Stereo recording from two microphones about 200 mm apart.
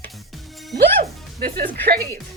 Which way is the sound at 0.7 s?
50° right (ahead or behind).